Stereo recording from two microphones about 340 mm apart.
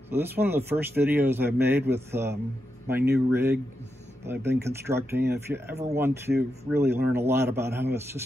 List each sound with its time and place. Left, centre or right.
0.1 s speech: centre
5.7 s speech: centre
5.9 s speech: centre